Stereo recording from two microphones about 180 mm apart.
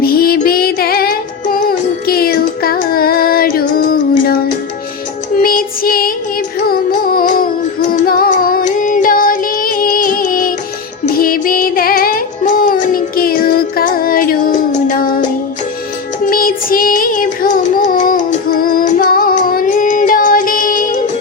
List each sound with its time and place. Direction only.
0.0 s music: 55° left (ahead or behind)
7.9 s child singing: 55° left (ahead or behind)
11.0 s music: 55° left (ahead or behind)
16.2 s child singing: 50° left (ahead or behind)